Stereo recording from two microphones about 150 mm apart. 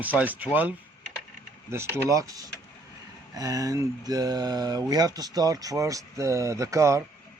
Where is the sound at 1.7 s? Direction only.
15° right (ahead or behind).